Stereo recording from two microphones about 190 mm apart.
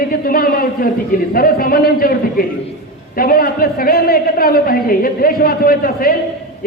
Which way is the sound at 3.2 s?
50° left (ahead or behind).